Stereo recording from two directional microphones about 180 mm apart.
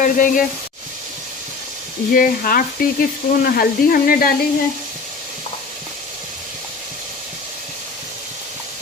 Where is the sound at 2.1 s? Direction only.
50° left (ahead or behind).